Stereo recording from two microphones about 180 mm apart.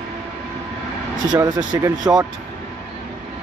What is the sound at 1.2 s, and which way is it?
Speech, 25° right (ahead or behind).